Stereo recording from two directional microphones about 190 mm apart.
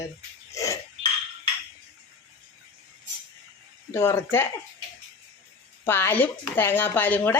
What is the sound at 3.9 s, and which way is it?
Speech, 15° left (ahead or behind).